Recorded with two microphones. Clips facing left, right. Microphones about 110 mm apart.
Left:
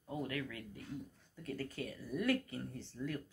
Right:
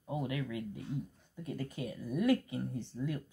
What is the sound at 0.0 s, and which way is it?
Speech, 15° right (ahead or behind).